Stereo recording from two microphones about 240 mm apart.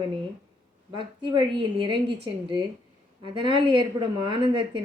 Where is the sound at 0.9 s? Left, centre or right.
Right.